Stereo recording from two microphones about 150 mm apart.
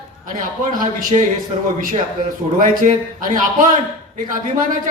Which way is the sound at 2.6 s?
65° right (ahead or behind).